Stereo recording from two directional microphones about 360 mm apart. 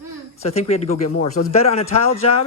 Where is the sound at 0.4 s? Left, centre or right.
Centre.